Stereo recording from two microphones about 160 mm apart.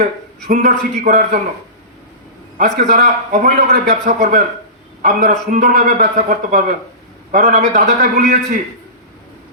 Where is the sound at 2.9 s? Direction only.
50° right (ahead or behind).